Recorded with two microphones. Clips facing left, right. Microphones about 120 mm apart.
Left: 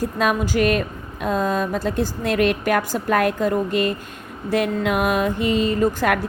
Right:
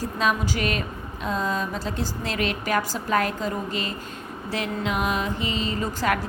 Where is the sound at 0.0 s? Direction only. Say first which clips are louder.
Left 4 dB; 55° left (ahead or behind).